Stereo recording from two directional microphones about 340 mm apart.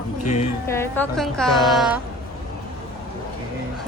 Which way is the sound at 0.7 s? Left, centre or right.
Centre.